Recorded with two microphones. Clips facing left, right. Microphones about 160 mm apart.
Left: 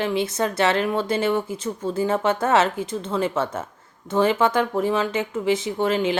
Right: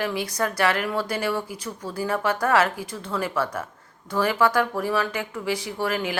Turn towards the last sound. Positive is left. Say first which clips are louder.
# left 5 dB
turn(degrees=20)  # may be behind; listen again after turning